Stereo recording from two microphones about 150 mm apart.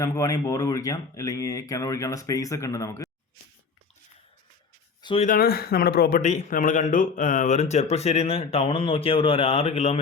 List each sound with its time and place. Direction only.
0.0 s speech: 20° left (ahead or behind)
5.2 s speech: 75° left (ahead or behind); by 10.0 s 45° left (ahead or behind)